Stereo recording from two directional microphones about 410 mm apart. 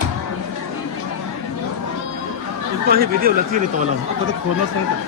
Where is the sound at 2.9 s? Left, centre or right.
Right.